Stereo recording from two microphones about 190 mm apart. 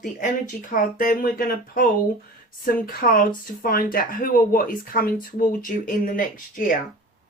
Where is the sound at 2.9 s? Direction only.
50° left (ahead or behind).